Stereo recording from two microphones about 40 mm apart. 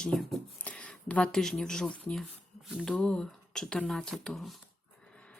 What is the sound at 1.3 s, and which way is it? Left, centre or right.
Speech, centre.